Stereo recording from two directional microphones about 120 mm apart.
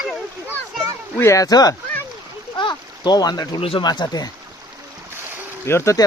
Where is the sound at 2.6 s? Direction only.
35° left (ahead or behind).